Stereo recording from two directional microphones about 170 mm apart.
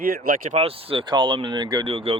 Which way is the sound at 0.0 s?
60° right (ahead or behind).